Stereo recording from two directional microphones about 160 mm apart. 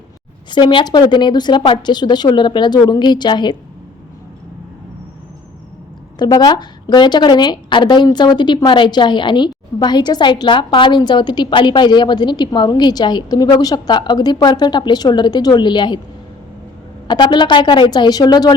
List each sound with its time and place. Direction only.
0.5 s a woman's voice: 30° left (ahead or behind)
6.1 s a woman's voice: 25° left (ahead or behind)
17.1 s a woman's voice: 30° left (ahead or behind)